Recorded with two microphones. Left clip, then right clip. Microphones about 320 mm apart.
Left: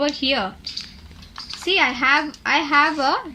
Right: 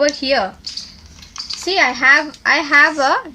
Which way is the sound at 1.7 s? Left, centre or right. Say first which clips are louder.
Right 6 dB; right.